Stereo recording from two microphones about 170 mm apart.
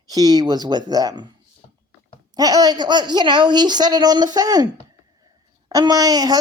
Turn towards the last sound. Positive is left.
turn(degrees=-20)  # may be behind; listen again after turning